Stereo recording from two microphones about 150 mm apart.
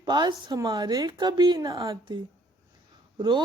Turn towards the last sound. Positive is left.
turn(degrees=-30)  # may be behind; listen again after turning